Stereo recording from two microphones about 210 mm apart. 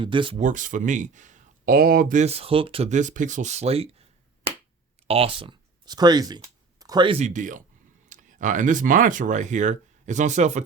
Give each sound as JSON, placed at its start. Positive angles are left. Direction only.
{"t": 0.0, "sound": "speech", "side_deg": -25}
{"t": 0.4, "sound": "speech", "side_deg": -35}
{"t": 5.0, "sound": "speech", "side_deg": -25}